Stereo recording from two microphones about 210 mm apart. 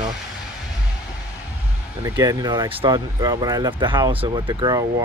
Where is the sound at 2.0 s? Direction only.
15° right (ahead or behind).